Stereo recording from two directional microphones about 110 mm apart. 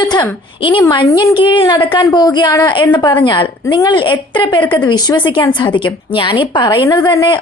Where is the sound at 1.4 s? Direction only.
45° left (ahead or behind).